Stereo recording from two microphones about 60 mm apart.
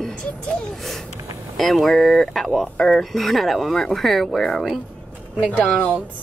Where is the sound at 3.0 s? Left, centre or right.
Centre.